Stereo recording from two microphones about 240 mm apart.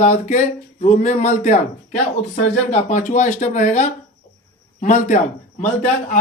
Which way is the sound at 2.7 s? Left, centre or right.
Left.